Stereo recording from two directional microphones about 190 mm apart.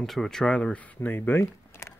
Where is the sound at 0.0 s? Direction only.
Centre (ahead or behind).